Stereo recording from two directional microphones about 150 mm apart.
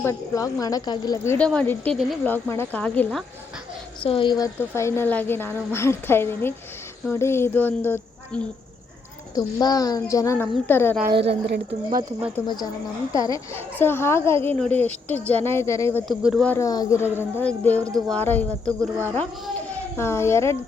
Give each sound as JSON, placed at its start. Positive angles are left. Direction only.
{"t": 0.0, "sound": "a woman's voice", "side_deg": 20}
{"t": 1.4, "sound": "a woman's voice", "side_deg": 5}
{"t": 4.0, "sound": "a woman's voice", "side_deg": 35}
{"t": 4.7, "sound": "a woman's voice", "side_deg": 15}
{"t": 9.3, "sound": "a woman's voice", "side_deg": 25}
{"t": 11.0, "sound": "a woman's voice", "side_deg": -80}
{"t": 12.5, "sound": "a woman's voice", "side_deg": 25}
{"t": 16.0, "sound": "speech", "side_deg": -5}
{"t": 16.4, "sound": "a woman's voice", "side_deg": 10}
{"t": 16.6, "sound": "a woman's voice", "side_deg": 25}
{"t": 19.7, "sound": "speech", "side_deg": 15}